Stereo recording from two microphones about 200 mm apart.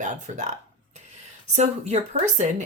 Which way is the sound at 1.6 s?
35° right (ahead or behind).